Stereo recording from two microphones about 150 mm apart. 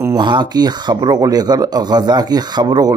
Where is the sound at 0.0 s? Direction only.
30° right (ahead or behind).